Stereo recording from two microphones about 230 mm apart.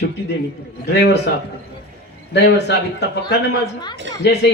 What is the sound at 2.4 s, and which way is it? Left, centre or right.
A man's voice, left.